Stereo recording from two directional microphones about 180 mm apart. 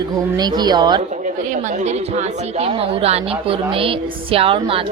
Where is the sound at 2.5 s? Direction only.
35° right (ahead or behind).